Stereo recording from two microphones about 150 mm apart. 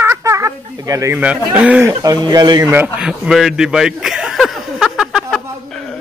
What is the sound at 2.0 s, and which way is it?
Speech, 25° right (ahead or behind).